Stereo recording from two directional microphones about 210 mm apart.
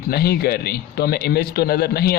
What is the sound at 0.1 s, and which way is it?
A man's voice, 50° left (ahead or behind).